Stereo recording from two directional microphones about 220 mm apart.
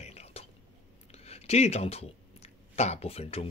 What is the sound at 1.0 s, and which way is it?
Speech, 30° left (ahead or behind).